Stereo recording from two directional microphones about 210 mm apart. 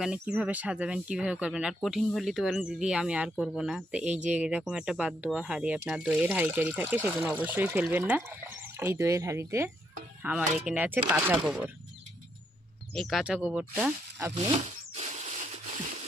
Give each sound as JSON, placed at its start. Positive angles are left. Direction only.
{"t": 0.0, "sound": "speech", "side_deg": -5}
{"t": 12.9, "sound": "speech", "side_deg": 0}
{"t": 14.4, "sound": "a sound", "side_deg": -30}